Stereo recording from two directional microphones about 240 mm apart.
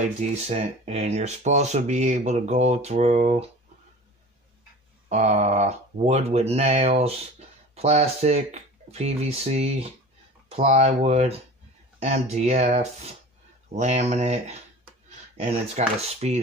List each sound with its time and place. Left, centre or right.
0.0 s speech: right
5.1 s speech: right